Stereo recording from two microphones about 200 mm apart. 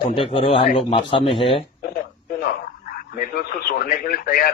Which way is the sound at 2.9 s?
50° left (ahead or behind).